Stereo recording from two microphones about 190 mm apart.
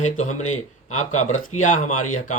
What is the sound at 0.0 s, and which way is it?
Speech, 35° left (ahead or behind).